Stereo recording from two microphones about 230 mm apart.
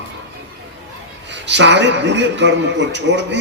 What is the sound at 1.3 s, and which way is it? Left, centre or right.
Speech, right.